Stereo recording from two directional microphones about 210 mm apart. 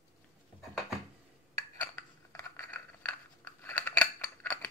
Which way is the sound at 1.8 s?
10° left (ahead or behind).